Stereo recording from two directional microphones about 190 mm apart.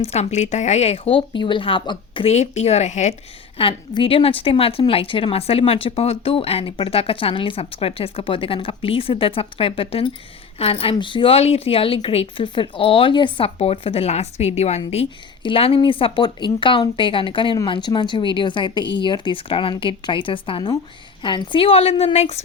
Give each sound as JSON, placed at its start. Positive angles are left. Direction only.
{"t": 0.0, "sound": "a woman's voice", "side_deg": 35}